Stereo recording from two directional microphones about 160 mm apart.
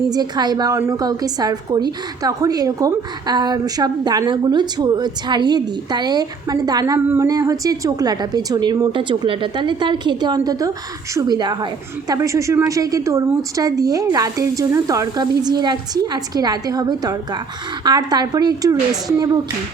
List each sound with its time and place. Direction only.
0.1 s a woman's voice: 25° right (ahead or behind)